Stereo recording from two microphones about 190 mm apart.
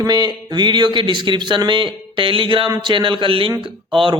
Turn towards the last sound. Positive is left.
turn(degrees=-25)  # may be behind; listen again after turning